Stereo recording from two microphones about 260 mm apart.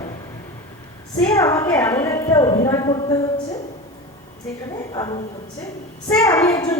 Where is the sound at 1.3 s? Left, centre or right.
Centre.